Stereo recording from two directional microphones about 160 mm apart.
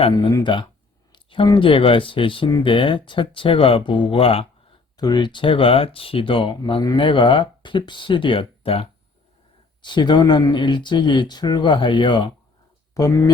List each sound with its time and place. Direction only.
0.2 s speech: 25° left (ahead or behind)
1.1 s a sound: 30° left (ahead or behind)
1.5 s speech: 35° left (ahead or behind)
4.9 s speech: 25° left (ahead or behind)
12.9 s speech: 20° left (ahead or behind)